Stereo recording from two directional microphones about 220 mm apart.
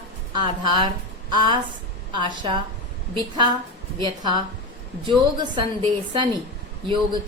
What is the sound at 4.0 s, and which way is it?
A woman's voice, 20° right (ahead or behind).